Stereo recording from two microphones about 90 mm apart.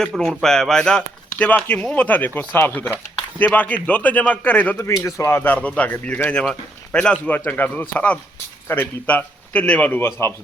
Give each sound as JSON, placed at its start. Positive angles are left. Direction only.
{"t": 0.2, "sound": "speech", "side_deg": 5}
{"t": 5.0, "sound": "a man's voice", "side_deg": 30}
{"t": 10.1, "sound": "a man's voice", "side_deg": 30}